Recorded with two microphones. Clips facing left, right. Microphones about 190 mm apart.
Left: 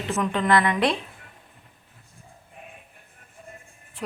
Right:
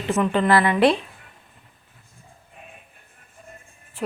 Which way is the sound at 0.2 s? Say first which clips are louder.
Right 3 dB; 5° right (ahead or behind).